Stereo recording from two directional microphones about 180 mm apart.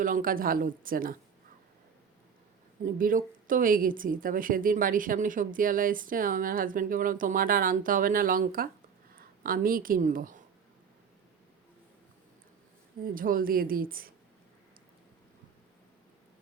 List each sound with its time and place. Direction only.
0.0 s a woman's voice: 50° right (ahead or behind)
2.8 s a woman's voice: 50° right (ahead or behind)
13.1 s a woman's voice: 50° right (ahead or behind)